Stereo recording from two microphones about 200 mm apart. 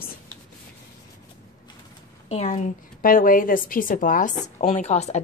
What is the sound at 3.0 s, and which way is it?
A woman's voice, 45° left (ahead or behind).